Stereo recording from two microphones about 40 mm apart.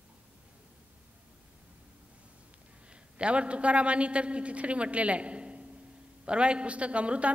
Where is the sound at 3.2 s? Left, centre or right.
Right.